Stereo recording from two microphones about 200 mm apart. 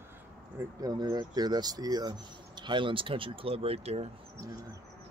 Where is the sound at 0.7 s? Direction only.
20° right (ahead or behind).